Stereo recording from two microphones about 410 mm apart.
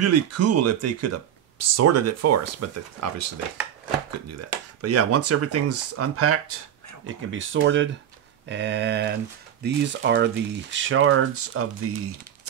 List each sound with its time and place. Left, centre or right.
0.0 s speech: right
4.3 s speech: right